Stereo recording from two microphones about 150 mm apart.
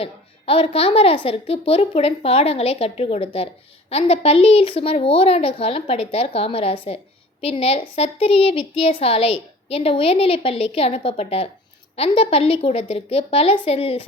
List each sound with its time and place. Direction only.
0.0 s a woman's voice: 40° left (ahead or behind)